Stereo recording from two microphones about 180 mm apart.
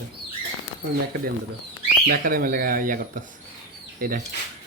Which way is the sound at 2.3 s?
50° right (ahead or behind).